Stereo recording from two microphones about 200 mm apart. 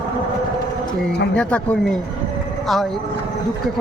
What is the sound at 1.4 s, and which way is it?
Speech, 5° left (ahead or behind).